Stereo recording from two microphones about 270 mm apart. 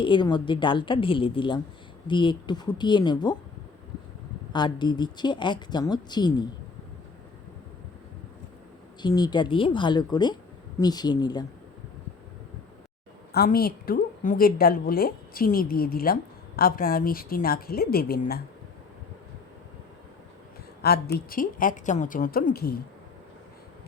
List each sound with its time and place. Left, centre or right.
0.0 s speech: centre
4.5 s speech: centre
9.0 s speech: centre
13.3 s a woman's voice: left
20.8 s a woman's voice: left